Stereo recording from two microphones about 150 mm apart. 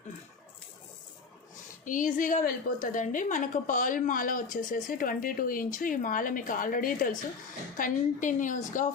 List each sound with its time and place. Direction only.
1.8 s a woman's voice: 60° left (ahead or behind)